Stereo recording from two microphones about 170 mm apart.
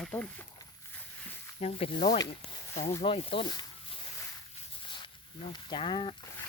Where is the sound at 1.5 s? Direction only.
35° left (ahead or behind).